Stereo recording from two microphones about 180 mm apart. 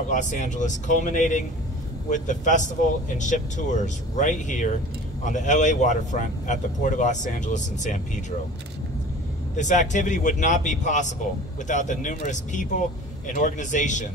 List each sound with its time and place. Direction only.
0.1 s speech: 45° left (ahead or behind)
9.6 s speech: 45° left (ahead or behind)